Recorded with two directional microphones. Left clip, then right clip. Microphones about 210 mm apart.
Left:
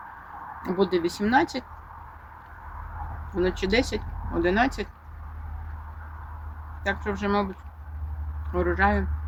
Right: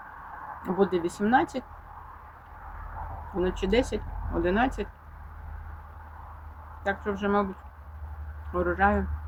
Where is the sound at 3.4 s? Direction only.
5° left (ahead or behind).